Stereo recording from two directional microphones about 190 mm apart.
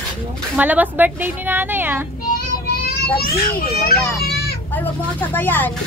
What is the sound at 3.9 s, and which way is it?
Children playing, 55° left (ahead or behind).